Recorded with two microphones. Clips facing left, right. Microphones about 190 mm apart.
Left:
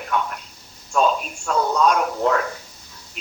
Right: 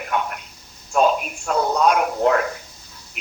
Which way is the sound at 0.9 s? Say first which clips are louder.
Right 2 dB; 10° right (ahead or behind).